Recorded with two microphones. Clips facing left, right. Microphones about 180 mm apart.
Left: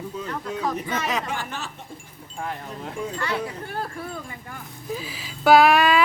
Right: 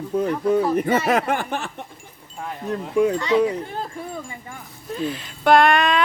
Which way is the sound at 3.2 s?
15° right (ahead or behind).